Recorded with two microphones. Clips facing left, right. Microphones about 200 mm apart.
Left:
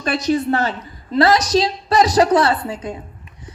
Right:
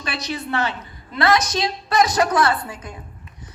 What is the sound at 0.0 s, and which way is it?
A woman's voice, 45° left (ahead or behind).